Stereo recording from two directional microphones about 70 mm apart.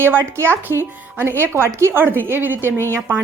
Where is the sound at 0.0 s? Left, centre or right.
Right.